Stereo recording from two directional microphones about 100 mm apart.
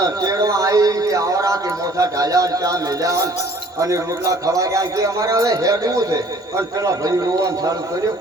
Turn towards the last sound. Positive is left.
turn(degrees=-35)  # may be behind; listen again after turning